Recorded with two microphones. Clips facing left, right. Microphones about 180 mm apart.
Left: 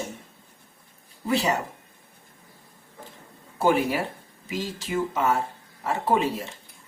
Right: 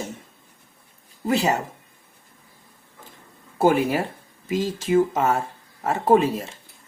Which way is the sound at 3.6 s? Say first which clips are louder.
Right 3 dB; 45° right (ahead or behind).